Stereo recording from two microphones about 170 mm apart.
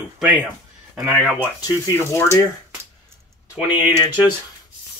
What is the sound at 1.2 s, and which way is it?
Speech, 20° left (ahead or behind).